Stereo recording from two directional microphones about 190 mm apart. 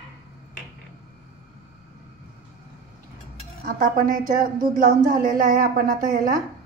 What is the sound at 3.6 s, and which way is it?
A woman's voice, 45° right (ahead or behind).